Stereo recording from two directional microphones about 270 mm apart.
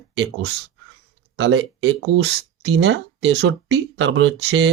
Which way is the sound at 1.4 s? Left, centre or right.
Right.